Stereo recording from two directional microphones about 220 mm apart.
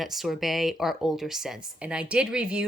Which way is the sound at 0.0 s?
Centre (ahead or behind).